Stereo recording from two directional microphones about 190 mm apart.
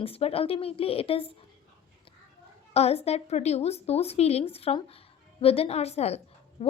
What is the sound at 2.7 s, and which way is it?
A woman's voice, 35° left (ahead or behind).